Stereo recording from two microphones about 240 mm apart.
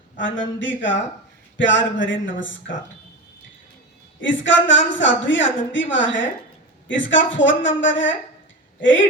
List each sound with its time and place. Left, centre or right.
0.6 s a woman's voice: left
4.2 s a woman's voice: left